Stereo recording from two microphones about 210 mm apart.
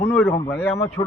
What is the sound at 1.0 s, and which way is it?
Speech, 20° left (ahead or behind).